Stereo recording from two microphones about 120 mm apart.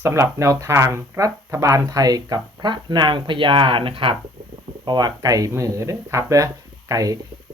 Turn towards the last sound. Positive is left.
turn(degrees=-30)  # may be behind; listen again after turning